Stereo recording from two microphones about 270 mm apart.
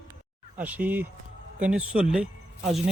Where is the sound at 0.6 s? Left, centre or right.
Centre.